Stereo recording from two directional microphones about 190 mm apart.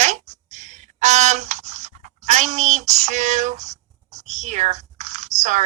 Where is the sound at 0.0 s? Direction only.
40° right (ahead or behind).